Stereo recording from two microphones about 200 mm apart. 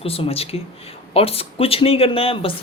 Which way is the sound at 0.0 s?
30° left (ahead or behind).